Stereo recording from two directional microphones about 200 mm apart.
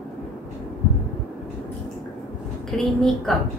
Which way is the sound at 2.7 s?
5° left (ahead or behind).